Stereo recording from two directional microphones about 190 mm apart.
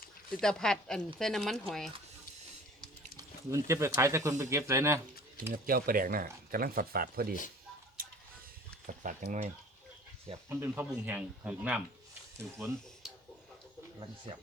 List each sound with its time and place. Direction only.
0.3 s speech: 5° left (ahead or behind)
3.2 s speech: 15° right (ahead or behind)
5.6 s speech: 50° right (ahead or behind)
8.0 s tick-tock: 50° right (ahead or behind)
8.9 s speech: 40° right (ahead or behind)
10.5 s speech: 10° right (ahead or behind)
14.3 s speech: 30° right (ahead or behind)